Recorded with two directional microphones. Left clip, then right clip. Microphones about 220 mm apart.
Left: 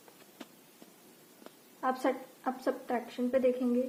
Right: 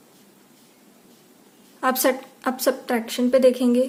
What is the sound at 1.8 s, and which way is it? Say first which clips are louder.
A woman's voice: right 11 dB; 55° right (ahead or behind).